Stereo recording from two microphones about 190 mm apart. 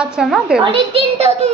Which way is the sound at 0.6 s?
30° right (ahead or behind).